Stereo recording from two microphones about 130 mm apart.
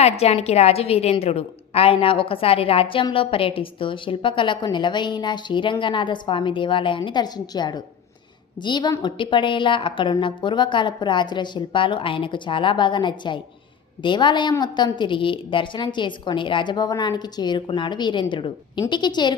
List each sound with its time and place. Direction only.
0.0 s a woman's voice: 55° left (ahead or behind); by 19.4 s 35° left (ahead or behind)